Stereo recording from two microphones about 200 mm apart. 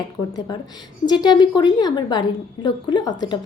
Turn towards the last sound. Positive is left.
turn(degrees=20)  # may be behind; listen again after turning